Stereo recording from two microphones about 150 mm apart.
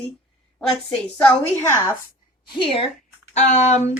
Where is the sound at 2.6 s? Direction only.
35° left (ahead or behind).